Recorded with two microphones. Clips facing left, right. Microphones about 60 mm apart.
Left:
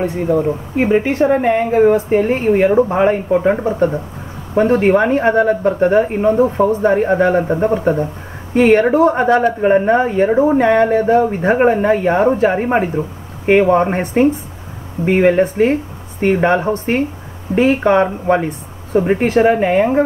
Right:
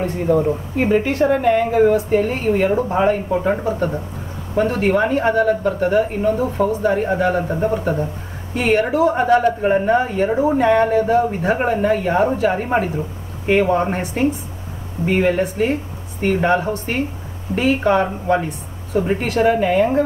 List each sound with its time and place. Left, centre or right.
0.0 s speech: centre
0.7 s speech: left
4.6 s speech: left
10.6 s speech: left
15.0 s speech: left